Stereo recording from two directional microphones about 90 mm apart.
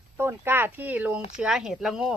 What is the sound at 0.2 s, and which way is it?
Speech, 25° right (ahead or behind).